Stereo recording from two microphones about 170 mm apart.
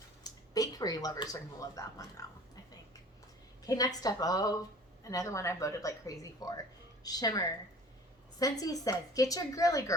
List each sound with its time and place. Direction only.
0.3 s speech: 20° left (ahead or behind)
3.6 s speech: 20° left (ahead or behind)